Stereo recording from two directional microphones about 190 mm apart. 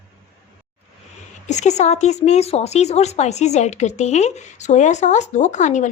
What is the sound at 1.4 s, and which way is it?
Speech, 40° left (ahead or behind).